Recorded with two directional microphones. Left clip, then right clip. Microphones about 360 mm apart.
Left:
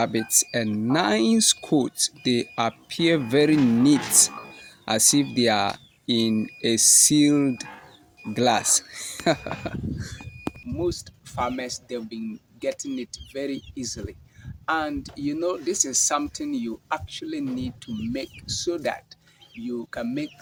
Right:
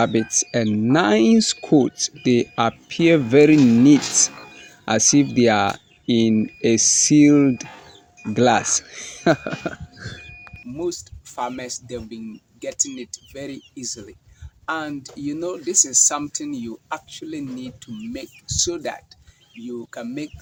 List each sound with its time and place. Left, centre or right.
0.0 s speech: left
10.8 s speech: centre